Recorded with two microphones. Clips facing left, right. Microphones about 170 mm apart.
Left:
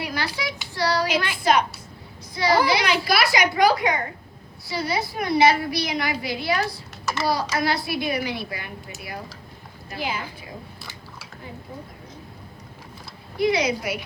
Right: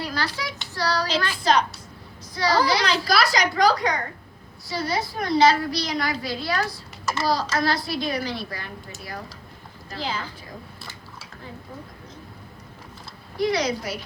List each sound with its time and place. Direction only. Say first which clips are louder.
0.0 s a child's voice: left 1 dB; 15° left (ahead or behind)
2.9 s a woman's voice: left 1 dB; 35° right (ahead or behind)
3.3 s a woman's voice: left 4 dB; 10° left (ahead or behind)
3.8 s a woman's voice: left 2 dB; 40° right (ahead or behind)
4.7 s a woman's voice: even; 10° left (ahead or behind)
13.4 s a woman's voice: left 2 dB; 10° left (ahead or behind)